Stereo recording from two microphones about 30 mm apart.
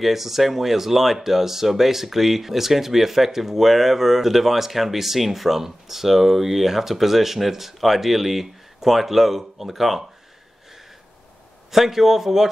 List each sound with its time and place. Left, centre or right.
0.0 s speech: centre
11.7 s speech: centre